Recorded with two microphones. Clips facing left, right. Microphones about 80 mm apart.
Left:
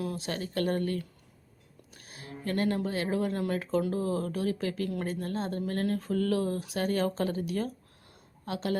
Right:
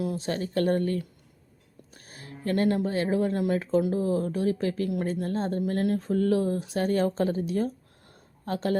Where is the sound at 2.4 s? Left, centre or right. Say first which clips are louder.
Right 4 dB; right.